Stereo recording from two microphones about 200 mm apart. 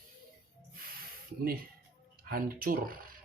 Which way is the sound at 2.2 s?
45° right (ahead or behind).